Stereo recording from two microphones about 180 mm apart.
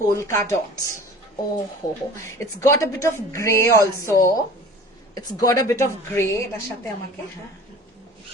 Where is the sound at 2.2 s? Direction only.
15° left (ahead or behind).